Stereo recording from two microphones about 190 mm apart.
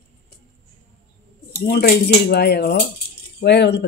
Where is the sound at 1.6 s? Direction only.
55° left (ahead or behind).